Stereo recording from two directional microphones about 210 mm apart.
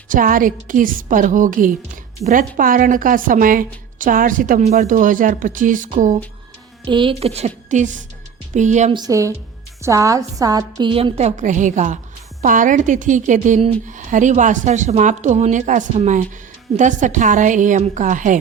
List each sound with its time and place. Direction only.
0.1 s a woman's voice: 40° right (ahead or behind)
6.8 s a woman's voice: 25° right (ahead or behind)
9.0 s a woman's voice: 15° right (ahead or behind); by 18.3 s 35° right (ahead or behind)